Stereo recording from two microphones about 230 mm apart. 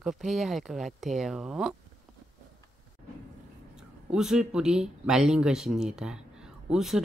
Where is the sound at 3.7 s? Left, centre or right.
Centre.